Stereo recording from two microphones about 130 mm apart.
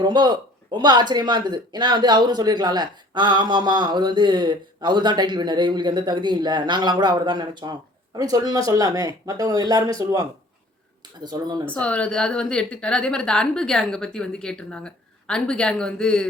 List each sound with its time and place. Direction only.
0.0 s speech: 35° right (ahead or behind)
11.6 s a woman's voice: 10° left (ahead or behind)